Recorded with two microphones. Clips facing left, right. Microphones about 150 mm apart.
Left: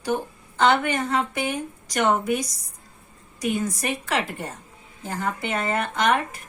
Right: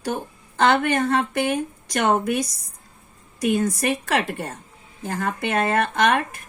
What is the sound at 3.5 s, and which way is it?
A woman's voice, 65° right (ahead or behind).